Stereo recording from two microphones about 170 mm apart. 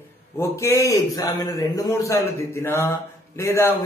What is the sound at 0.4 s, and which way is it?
A man's voice, 15° left (ahead or behind).